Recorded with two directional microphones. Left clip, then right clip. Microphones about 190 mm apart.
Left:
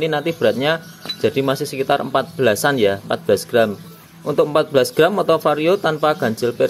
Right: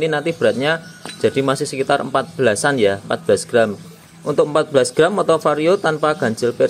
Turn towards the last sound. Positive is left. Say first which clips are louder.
# right 1 dB
turn(degrees=-5)  # may be behind; listen again after turning